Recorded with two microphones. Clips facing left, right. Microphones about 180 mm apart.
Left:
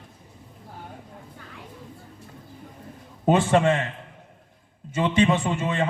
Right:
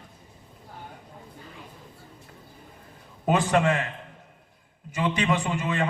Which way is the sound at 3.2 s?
25° left (ahead or behind).